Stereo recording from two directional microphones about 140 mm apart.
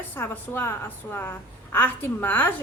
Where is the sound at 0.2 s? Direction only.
15° left (ahead or behind).